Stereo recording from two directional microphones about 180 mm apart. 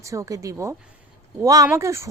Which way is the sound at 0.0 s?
15° right (ahead or behind).